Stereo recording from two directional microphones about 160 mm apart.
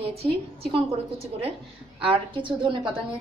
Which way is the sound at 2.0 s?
30° right (ahead or behind).